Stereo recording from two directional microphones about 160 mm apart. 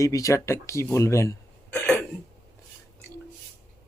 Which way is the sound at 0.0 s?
20° left (ahead or behind).